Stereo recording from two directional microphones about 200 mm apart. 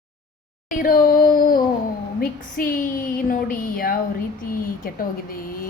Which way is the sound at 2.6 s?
45° left (ahead or behind).